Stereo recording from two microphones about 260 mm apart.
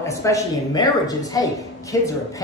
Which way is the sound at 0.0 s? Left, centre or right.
Centre.